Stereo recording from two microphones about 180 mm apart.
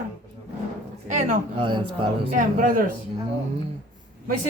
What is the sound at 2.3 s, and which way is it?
Speech, 50° right (ahead or behind).